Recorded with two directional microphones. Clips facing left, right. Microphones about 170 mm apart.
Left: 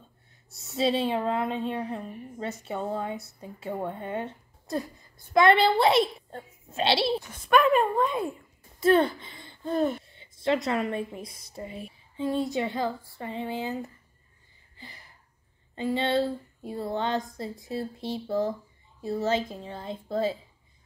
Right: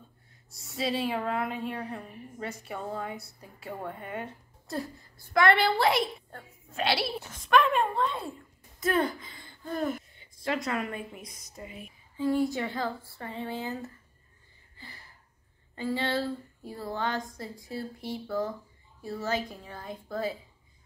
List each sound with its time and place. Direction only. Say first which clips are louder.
0.6 s a woman's voice: left 5 dB; 25° left (ahead or behind)
7.2 s speech: left 1 dB; 5° left (ahead or behind)
8.7 s a woman's voice: left 6 dB; 30° left (ahead or behind)
14.8 s a sound: left 2 dB; 20° left (ahead or behind)
15.7 s a woman's voice: left 4 dB; 20° left (ahead or behind)